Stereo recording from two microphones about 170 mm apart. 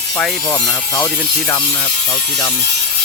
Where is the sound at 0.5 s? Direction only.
15° left (ahead or behind).